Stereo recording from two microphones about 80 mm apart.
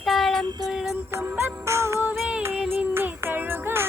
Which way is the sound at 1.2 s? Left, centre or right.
Right.